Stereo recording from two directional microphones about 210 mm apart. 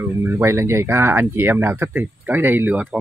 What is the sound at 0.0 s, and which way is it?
Speech, 10° right (ahead or behind).